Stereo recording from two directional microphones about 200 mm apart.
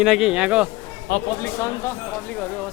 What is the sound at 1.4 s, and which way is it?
Speech, 15° left (ahead or behind).